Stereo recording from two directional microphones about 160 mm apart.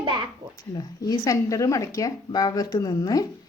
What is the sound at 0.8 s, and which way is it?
Speech, 25° left (ahead or behind).